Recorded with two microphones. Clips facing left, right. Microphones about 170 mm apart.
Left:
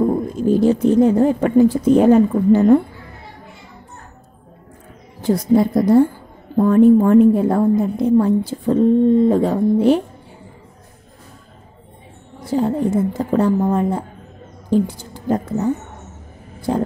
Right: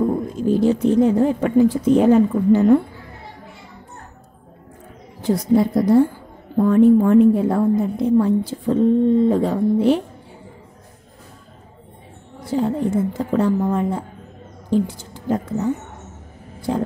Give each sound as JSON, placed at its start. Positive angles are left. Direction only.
{"t": 0.0, "sound": "speech", "side_deg": 45}
{"t": 5.2, "sound": "speech", "side_deg": 40}
{"t": 12.5, "sound": "a woman's voice", "side_deg": 40}